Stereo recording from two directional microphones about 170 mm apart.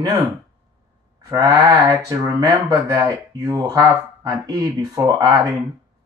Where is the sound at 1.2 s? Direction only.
20° right (ahead or behind).